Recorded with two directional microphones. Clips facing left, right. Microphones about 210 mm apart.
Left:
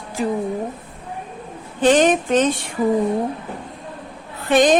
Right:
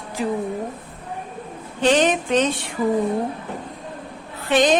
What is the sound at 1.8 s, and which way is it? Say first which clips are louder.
Music: left 3 dB; 45° left (ahead or behind).